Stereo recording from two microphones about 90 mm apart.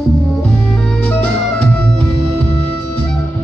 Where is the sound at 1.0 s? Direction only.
15° left (ahead or behind).